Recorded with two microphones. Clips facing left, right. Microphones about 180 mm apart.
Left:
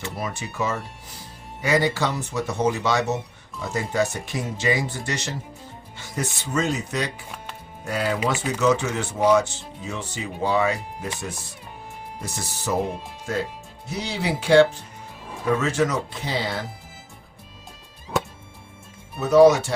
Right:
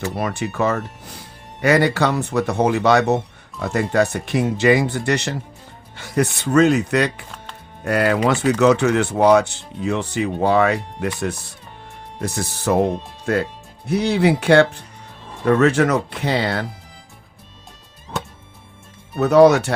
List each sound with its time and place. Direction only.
0.2 s speech: 65° right (ahead or behind)
12.2 s speech: 60° right (ahead or behind)
19.1 s speech: 65° right (ahead or behind)